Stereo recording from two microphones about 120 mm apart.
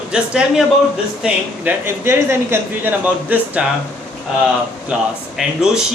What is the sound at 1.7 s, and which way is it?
A woman's voice, 15° right (ahead or behind).